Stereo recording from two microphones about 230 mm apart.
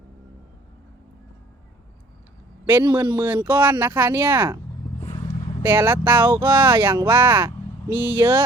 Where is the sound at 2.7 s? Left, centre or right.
Centre.